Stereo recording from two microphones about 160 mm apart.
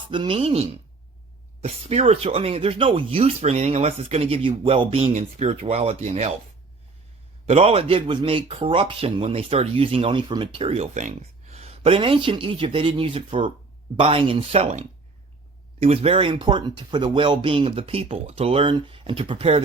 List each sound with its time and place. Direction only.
0.1 s speech: 30° right (ahead or behind)
1.6 s speech: 40° right (ahead or behind)
7.4 s speech: 40° right (ahead or behind)